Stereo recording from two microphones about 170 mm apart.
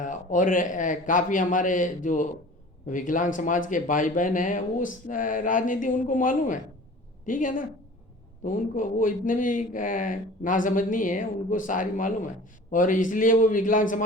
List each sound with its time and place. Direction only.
0.0 s speech: 50° left (ahead or behind)